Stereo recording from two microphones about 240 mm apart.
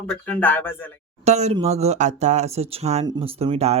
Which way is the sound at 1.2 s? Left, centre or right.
Right.